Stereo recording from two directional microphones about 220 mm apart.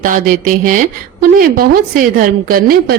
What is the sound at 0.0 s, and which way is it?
Speech, 40° right (ahead or behind).